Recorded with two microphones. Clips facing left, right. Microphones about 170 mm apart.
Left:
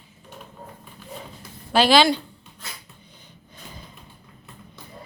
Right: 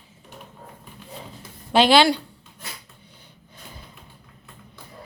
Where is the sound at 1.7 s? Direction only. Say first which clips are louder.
Right 1 dB; 15° right (ahead or behind).